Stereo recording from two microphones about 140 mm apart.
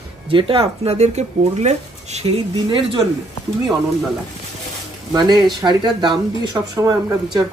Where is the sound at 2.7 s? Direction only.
30° right (ahead or behind).